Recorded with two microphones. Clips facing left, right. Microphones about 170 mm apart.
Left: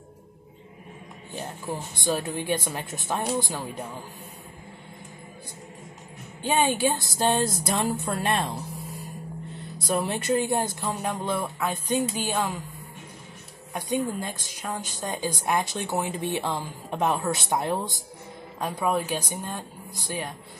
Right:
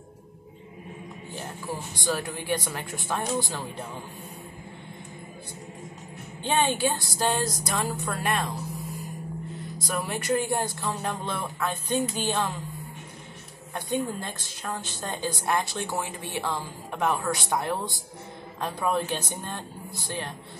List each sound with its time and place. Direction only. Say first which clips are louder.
1.7 s a woman's voice: left 2 dB; 20° left (ahead or behind)
6.4 s a woman's voice: left 2 dB; 10° left (ahead or behind)
9.8 s a woman's voice: left 3 dB; 25° left (ahead or behind)
14.2 s a woman's voice: left 2 dB; 15° left (ahead or behind)